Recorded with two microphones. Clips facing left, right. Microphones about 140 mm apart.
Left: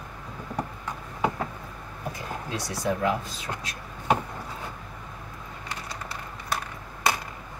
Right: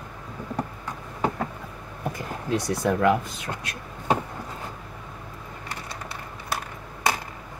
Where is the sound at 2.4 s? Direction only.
55° right (ahead or behind).